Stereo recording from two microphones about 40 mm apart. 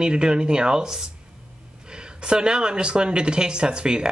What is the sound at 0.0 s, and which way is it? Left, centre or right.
Speech, right.